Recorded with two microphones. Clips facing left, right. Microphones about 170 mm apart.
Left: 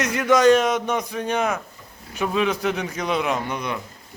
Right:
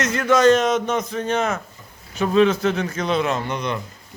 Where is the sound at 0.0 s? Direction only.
15° left (ahead or behind).